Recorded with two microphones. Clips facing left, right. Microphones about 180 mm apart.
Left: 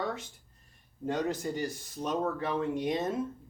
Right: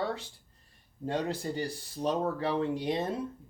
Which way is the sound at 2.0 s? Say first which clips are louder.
Right 2 dB; 35° right (ahead or behind).